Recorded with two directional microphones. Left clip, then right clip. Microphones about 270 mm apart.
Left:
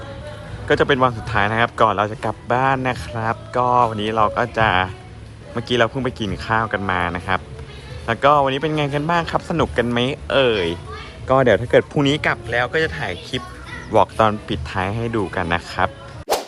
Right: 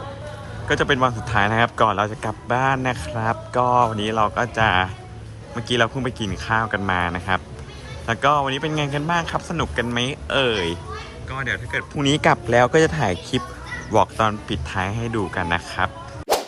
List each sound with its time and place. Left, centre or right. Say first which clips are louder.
0.7 s a man's voice: left 3 dB; centre
12.0 s a man's voice: right 2 dB; centre